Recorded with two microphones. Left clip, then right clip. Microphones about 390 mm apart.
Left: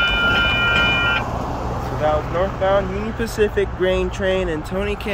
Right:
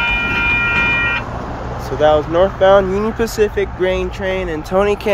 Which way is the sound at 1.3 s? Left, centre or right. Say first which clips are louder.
Even; left.